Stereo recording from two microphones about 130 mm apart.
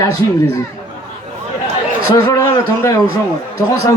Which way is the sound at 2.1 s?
25° left (ahead or behind).